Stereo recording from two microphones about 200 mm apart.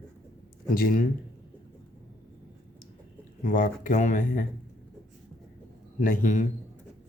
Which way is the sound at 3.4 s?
40° left (ahead or behind).